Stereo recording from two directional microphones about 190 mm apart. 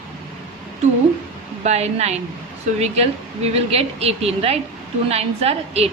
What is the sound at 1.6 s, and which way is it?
A woman's voice, 35° right (ahead or behind).